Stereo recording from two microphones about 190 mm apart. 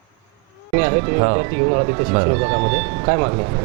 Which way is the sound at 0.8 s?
25° right (ahead or behind).